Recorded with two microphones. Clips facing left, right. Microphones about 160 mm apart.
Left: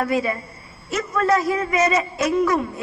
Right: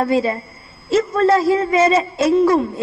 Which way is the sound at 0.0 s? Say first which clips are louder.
Right 4 dB; 30° right (ahead or behind).